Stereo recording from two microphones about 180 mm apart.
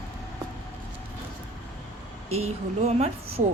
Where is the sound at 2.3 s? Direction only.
35° right (ahead or behind).